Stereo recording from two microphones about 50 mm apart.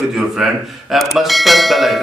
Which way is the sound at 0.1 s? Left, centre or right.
Centre.